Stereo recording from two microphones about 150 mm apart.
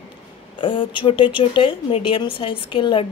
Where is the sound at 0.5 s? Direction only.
35° left (ahead or behind).